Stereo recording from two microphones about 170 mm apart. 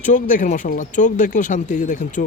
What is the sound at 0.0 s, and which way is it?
A man's voice, 50° left (ahead or behind).